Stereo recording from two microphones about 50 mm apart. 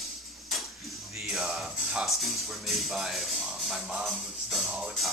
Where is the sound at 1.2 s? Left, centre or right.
Centre.